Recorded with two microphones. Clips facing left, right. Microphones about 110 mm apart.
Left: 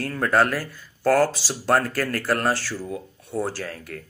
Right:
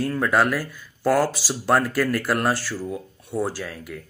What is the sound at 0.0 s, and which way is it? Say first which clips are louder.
Speech: even; 10° right (ahead or behind).